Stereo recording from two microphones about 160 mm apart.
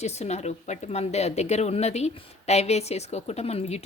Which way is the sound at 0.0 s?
45° left (ahead or behind).